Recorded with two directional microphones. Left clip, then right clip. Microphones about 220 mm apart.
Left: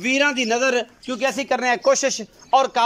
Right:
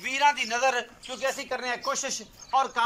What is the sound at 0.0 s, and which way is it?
A man's voice, 50° left (ahead or behind).